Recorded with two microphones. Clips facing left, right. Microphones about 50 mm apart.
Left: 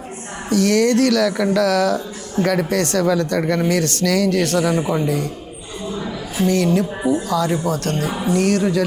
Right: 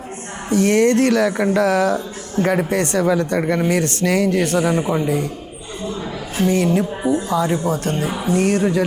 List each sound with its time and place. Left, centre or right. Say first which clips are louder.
0.5 s speech: right 1 dB; right
4.8 s a man's voice: even; centre
5.0 s speech: right 1 dB; right
6.4 s speech: even; right